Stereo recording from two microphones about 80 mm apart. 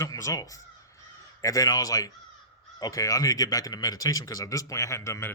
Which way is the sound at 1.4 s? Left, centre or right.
Left.